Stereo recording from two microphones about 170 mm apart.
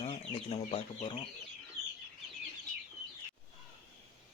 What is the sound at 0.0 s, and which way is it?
Speech, 35° left (ahead or behind).